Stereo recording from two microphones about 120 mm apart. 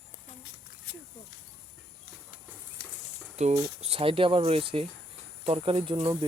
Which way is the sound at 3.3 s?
65° right (ahead or behind).